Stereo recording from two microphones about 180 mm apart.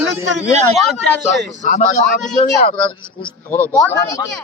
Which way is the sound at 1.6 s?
45° left (ahead or behind).